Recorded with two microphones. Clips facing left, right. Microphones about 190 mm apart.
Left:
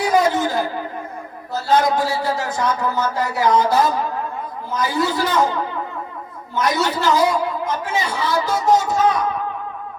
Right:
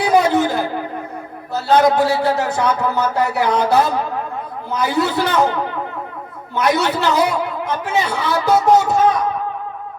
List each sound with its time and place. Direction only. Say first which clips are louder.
0.0 s a sound: right 3 dB; 65° right (ahead or behind)
1.6 s speech: right 4 dB; 65° right (ahead or behind)
6.5 s speech: right 3 dB; 65° right (ahead or behind)